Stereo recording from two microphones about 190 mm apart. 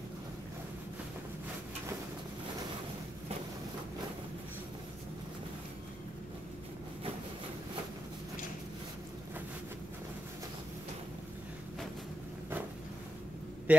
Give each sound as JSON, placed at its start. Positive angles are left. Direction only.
{"t": 13.7, "sound": "a man's voice", "side_deg": -5}